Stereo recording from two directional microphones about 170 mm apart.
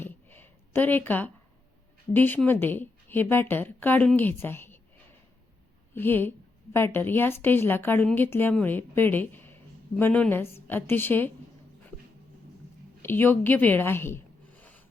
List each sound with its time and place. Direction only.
0.0 s a sound: 10° left (ahead or behind)
2.1 s a woman's voice: 10° left (ahead or behind)
5.9 s a woman's voice: 10° left (ahead or behind)
13.0 s speech: 15° left (ahead or behind)